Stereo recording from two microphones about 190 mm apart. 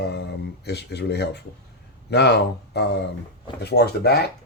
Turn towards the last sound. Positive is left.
turn(degrees=60)  # may be behind; listen again after turning